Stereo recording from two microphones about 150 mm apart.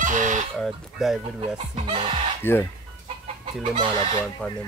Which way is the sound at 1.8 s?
30° right (ahead or behind).